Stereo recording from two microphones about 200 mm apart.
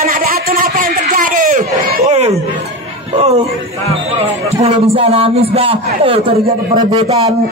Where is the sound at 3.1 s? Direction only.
30° right (ahead or behind).